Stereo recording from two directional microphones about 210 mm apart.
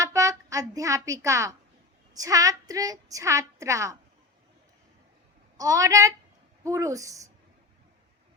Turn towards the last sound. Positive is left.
turn(degrees=-15)  # may be behind; listen again after turning